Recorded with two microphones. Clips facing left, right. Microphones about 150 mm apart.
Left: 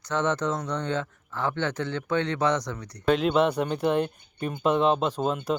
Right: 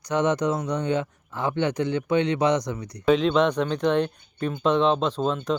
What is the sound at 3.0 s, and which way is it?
Speech, 5° left (ahead or behind).